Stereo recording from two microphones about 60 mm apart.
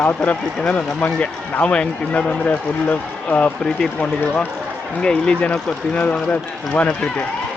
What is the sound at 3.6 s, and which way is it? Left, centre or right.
Speech, centre.